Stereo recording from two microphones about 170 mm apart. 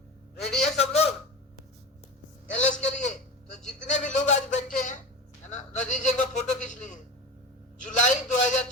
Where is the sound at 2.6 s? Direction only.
45° left (ahead or behind).